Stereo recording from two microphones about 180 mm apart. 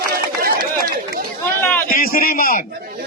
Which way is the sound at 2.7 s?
55° right (ahead or behind).